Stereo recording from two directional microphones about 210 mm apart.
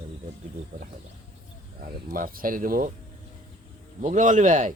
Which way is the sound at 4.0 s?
35° right (ahead or behind).